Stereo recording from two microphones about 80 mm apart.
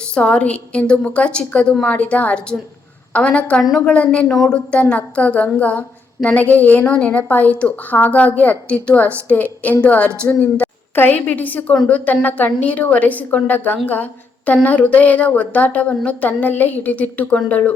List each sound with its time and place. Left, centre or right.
0.1 s a woman's voice: centre
4.3 s speech: centre
4.5 s a woman's voice: centre